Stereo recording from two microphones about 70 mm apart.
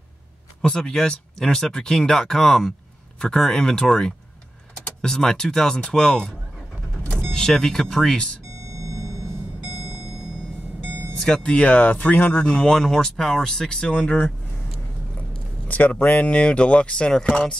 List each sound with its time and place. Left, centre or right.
0.6 s speech: centre
8.6 s vehicle: right
11.1 s speech: centre; by 12.4 s left
12.4 s speech: centre
15.7 s speech: left